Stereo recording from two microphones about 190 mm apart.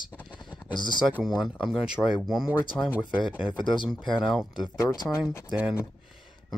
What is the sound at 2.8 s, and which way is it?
Speech, 10° left (ahead or behind).